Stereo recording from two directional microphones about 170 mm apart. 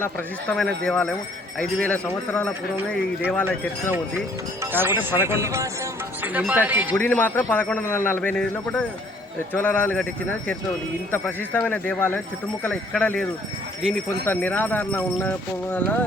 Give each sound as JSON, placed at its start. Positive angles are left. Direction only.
{"t": 0.0, "sound": "a man's voice", "side_deg": 5}
{"t": 4.6, "sound": "speech", "side_deg": -10}
{"t": 6.9, "sound": "a man's voice", "side_deg": 10}
{"t": 14.3, "sound": "a man's voice", "side_deg": 10}